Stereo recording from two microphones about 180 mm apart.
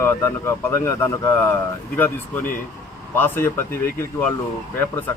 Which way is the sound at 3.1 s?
10° left (ahead or behind).